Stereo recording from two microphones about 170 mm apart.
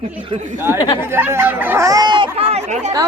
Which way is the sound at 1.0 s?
15° right (ahead or behind).